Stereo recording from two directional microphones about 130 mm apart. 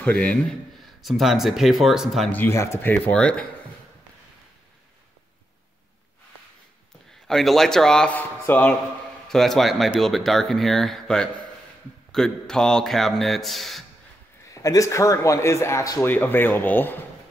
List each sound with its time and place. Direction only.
0.0 s speech: 10° left (ahead or behind)
2.3 s speech: 20° left (ahead or behind)
7.2 s speech: centre (ahead or behind)
9.3 s speech: centre (ahead or behind)
14.5 s speech: 25° left (ahead or behind)